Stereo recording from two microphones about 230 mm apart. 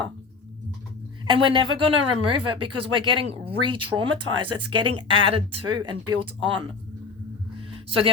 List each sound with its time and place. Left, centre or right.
1.3 s speech: right
4.5 s speech: right
4.9 s speech: right
7.7 s a sound: right